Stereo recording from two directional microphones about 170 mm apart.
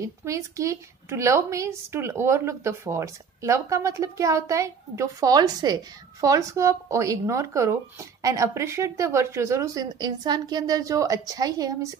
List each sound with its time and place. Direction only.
0.0 s a woman's voice: 15° right (ahead or behind)